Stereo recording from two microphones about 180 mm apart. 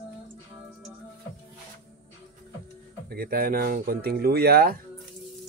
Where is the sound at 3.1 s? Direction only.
55° right (ahead or behind).